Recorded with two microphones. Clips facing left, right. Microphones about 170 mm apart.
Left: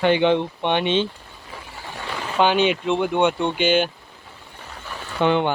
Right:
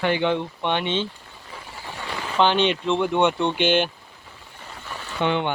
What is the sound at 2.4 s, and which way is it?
Speech, 10° left (ahead or behind).